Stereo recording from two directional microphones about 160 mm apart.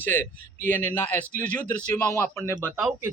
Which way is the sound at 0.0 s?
10° left (ahead or behind).